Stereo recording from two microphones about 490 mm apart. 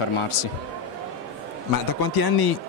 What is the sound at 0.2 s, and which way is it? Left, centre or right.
Speech, left.